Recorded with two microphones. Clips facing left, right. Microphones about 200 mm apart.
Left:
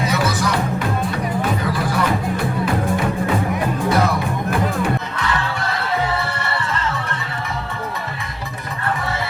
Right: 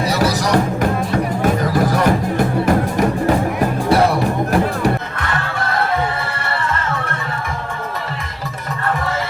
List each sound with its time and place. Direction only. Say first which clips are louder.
0.1 s music: right 4 dB; 35° right (ahead or behind)
3.8 s music: right 4 dB; 30° right (ahead or behind)
4.5 s music: right 2 dB; 50° right (ahead or behind)